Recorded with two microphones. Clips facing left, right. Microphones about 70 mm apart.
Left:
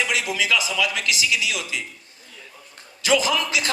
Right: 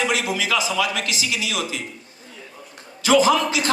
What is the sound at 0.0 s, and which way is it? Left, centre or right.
Speech, right.